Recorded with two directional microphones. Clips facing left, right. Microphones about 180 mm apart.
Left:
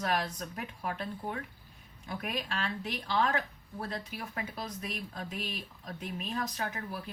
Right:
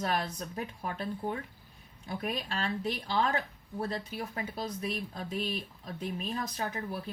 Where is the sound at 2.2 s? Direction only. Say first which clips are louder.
Right 2 dB; 35° right (ahead or behind).